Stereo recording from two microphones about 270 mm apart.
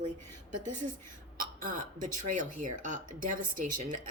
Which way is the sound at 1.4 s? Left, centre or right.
Right.